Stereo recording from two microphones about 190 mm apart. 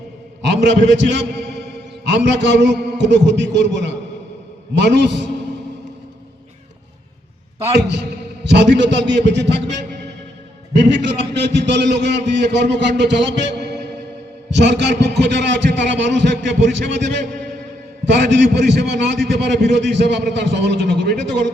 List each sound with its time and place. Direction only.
0.4 s a man's voice: 70° right (ahead or behind)
8.4 s a man's voice: 65° right (ahead or behind)
18.2 s a man's voice: 65° right (ahead or behind)